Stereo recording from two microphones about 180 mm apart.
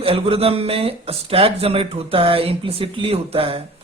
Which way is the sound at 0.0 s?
30° right (ahead or behind).